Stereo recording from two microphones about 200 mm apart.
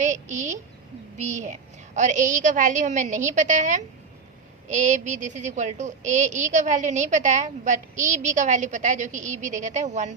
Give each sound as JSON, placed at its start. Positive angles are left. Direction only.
{"t": 0.0, "sound": "a woman's voice", "side_deg": -35}